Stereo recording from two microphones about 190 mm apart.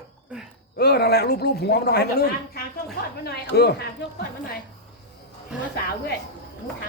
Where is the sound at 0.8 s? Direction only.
55° left (ahead or behind).